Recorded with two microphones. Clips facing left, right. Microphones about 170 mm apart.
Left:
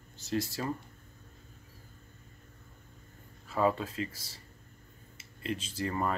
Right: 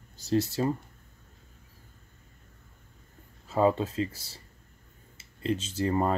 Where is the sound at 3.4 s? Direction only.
25° right (ahead or behind).